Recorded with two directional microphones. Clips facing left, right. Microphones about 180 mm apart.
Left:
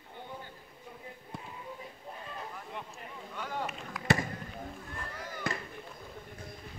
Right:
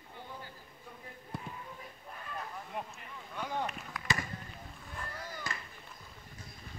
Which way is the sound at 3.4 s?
15° right (ahead or behind).